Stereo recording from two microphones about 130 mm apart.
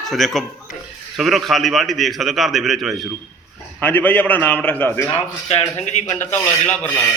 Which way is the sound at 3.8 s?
15° left (ahead or behind).